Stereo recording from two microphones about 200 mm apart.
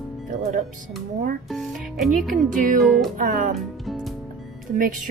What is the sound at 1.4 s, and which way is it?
Music, centre (ahead or behind).